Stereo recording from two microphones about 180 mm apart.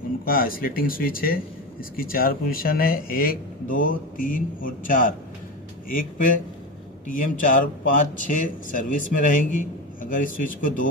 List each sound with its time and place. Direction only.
0.2 s speech: 55° left (ahead or behind)